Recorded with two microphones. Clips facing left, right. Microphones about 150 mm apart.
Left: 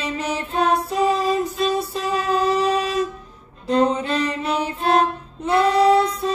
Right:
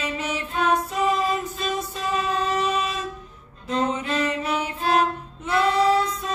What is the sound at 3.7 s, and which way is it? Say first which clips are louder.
Music: left 6 dB; 35° left (ahead or behind).